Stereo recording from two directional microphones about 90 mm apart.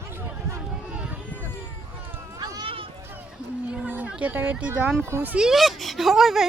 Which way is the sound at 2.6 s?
80° right.